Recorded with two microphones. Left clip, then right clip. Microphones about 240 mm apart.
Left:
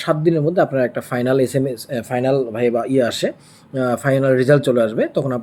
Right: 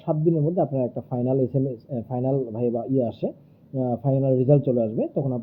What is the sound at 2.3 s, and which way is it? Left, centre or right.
Speech, left.